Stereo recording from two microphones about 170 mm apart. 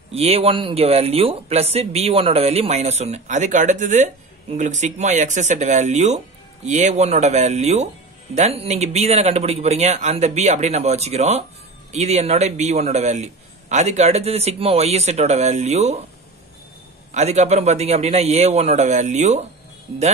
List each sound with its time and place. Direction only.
0.1 s speech: 35° right (ahead or behind)
17.1 s speech: 40° right (ahead or behind)